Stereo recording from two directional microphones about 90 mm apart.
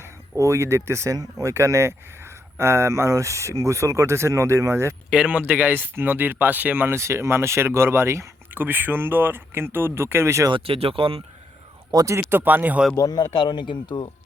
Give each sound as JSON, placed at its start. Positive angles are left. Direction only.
{"t": 0.0, "sound": "speech", "side_deg": -30}
{"t": 5.1, "sound": "speech", "side_deg": -10}
{"t": 6.9, "sound": "speech", "side_deg": -30}
{"t": 10.5, "sound": "speech", "side_deg": -90}
{"t": 11.9, "sound": "speech", "side_deg": -45}
{"t": 12.3, "sound": "speech", "side_deg": -20}
{"t": 13.0, "sound": "speech", "side_deg": 45}